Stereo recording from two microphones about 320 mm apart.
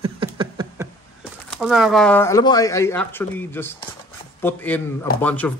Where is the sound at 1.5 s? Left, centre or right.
Centre.